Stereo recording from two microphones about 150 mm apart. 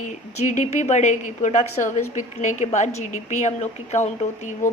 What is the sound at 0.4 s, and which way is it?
A woman's voice, 55° left (ahead or behind).